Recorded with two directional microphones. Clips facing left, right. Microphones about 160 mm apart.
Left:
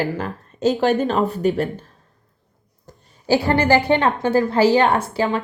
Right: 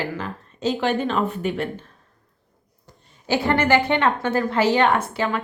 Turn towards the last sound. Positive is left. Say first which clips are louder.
# left 3 dB
turn(degrees=30)  # may be behind; listen again after turning